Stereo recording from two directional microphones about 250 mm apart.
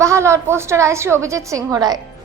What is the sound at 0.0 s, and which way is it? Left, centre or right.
A woman's voice, centre.